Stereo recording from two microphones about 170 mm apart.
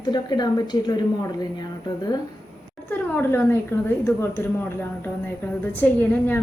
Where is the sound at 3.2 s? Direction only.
15° left (ahead or behind).